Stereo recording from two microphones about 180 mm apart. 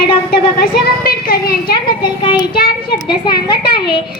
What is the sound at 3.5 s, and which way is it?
Speech, 25° left (ahead or behind).